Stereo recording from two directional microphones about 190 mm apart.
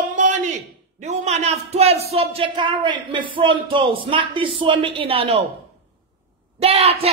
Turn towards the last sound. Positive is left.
turn(degrees=-30)  # may be behind; listen again after turning